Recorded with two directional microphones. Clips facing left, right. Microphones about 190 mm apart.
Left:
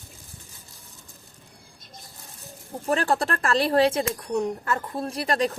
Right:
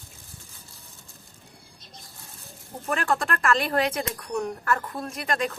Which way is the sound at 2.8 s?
30° left (ahead or behind).